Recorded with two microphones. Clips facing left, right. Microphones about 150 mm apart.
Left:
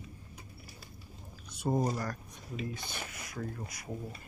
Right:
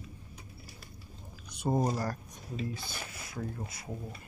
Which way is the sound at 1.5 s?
20° right (ahead or behind).